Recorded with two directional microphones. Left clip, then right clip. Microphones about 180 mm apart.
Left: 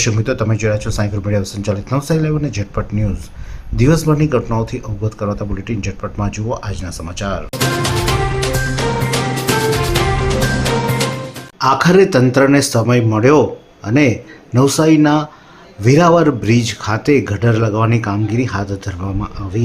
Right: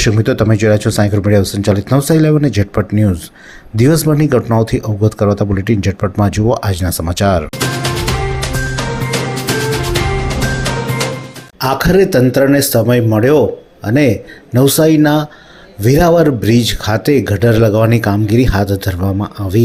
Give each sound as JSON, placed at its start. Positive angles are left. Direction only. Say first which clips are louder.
{"t": 0.0, "sound": "speech", "louder": "right 4 dB", "side_deg": -25}
{"t": 7.8, "sound": "music", "louder": "even", "side_deg": 0}
{"t": 11.6, "sound": "speech", "louder": "left 1 dB", "side_deg": -10}